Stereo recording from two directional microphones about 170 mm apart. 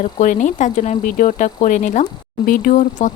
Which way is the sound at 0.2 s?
50° left (ahead or behind).